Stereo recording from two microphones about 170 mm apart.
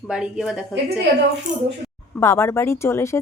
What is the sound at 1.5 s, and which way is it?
Speech, 45° right (ahead or behind).